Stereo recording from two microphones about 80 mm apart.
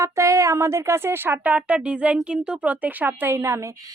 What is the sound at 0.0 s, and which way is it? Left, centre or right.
Speech, right.